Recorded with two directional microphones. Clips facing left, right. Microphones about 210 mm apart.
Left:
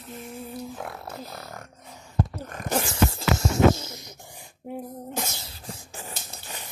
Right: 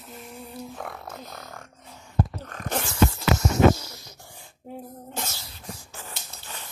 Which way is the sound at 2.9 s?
25° left (ahead or behind).